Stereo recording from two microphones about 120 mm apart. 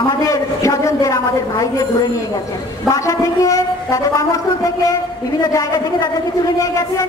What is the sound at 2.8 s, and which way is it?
Speech, 25° left (ahead or behind).